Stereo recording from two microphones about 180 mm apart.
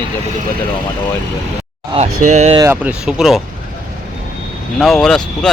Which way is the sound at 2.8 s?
5° right (ahead or behind).